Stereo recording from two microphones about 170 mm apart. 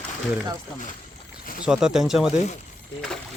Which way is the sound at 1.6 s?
5° right (ahead or behind).